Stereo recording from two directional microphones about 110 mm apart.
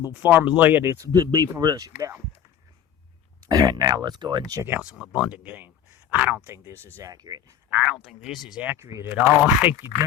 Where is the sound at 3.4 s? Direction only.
35° right (ahead or behind).